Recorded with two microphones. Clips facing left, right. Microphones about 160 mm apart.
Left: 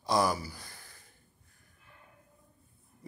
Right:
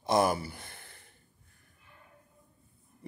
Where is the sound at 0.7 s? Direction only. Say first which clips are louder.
Right 2 dB; 60° right (ahead or behind).